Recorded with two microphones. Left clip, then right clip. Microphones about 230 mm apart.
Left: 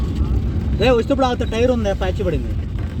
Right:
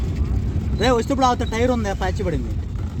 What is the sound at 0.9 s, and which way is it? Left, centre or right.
Speech, centre.